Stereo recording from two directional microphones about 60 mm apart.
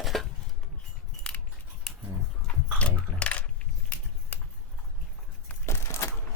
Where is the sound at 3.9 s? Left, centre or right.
Left.